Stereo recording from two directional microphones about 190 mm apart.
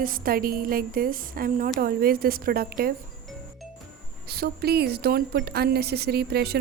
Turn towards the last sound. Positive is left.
turn(degrees=-55)  # may be behind; listen again after turning